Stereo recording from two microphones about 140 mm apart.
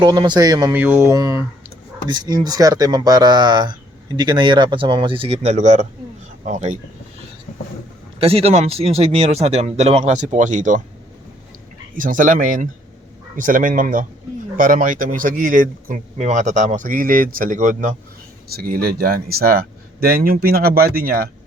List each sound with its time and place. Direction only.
0.0 s speech: 30° right (ahead or behind)
0.7 s a man's voice: 15° right (ahead or behind); by 6.7 s 60° right (ahead or behind)
8.2 s speech: 45° right (ahead or behind); by 10.8 s 65° right (ahead or behind)
11.9 s speech: 70° right (ahead or behind)
18.4 s speech: 90° right